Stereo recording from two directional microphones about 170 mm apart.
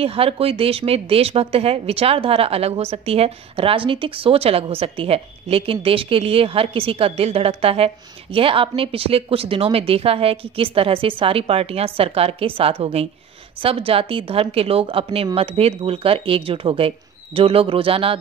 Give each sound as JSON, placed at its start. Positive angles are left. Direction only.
{"t": 0.0, "sound": "speech", "side_deg": -35}